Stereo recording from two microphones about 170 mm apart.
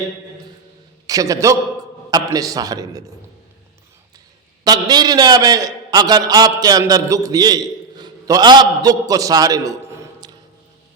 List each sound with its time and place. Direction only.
1.0 s a man's voice: 20° right (ahead or behind)
4.6 s a man's voice: 25° right (ahead or behind)